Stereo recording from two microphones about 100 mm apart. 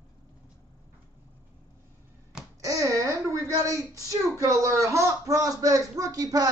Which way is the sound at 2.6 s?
35° right (ahead or behind).